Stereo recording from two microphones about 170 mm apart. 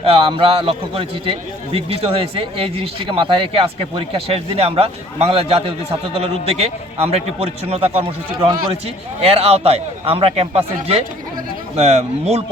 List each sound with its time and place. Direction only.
0.0 s a man's voice: 35° right (ahead or behind)